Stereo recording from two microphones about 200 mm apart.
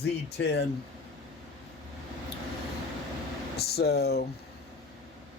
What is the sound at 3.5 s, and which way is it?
Speech, 55° left (ahead or behind).